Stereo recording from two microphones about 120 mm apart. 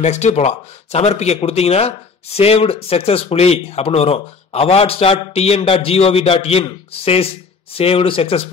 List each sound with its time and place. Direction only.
0.0 s a man's voice: 70° left (ahead or behind); by 8.5 s 55° left (ahead or behind)